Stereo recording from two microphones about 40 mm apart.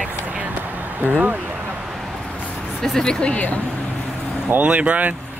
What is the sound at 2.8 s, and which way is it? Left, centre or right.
Speech, centre.